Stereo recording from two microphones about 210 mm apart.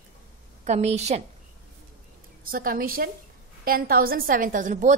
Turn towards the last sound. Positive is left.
turn(degrees=-35)  # may be behind; listen again after turning